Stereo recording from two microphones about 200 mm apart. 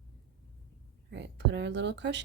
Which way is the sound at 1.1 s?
60° right (ahead or behind).